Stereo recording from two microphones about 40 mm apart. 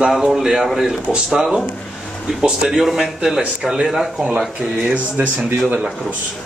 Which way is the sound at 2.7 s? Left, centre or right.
Centre.